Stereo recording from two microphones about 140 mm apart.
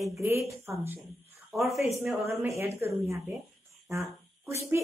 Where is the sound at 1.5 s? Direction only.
Centre (ahead or behind).